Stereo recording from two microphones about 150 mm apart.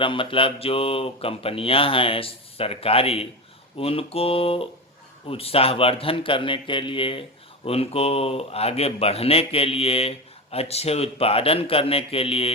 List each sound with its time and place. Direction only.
0.0 s speech: 35° left (ahead or behind)